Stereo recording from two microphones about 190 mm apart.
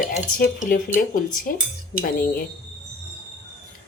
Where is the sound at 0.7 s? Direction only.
45° left (ahead or behind).